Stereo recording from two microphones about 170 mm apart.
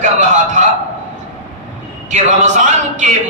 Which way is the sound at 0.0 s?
45° right (ahead or behind).